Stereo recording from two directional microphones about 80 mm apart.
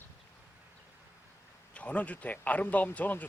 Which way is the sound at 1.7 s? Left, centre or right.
Centre.